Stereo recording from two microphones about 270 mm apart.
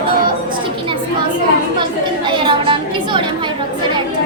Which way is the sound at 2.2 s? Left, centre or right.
Centre.